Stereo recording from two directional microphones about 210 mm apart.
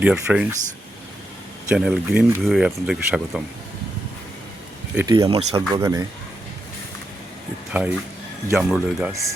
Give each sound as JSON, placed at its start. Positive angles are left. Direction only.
{"t": 0.0, "sound": "speech", "side_deg": -5}
{"t": 1.7, "sound": "speech", "side_deg": -5}
{"t": 5.0, "sound": "speech", "side_deg": -20}
{"t": 5.8, "sound": "speech", "side_deg": -15}
{"t": 7.7, "sound": "speech", "side_deg": -5}